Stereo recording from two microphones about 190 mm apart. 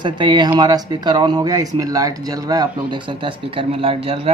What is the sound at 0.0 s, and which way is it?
Speech, 25° right (ahead or behind).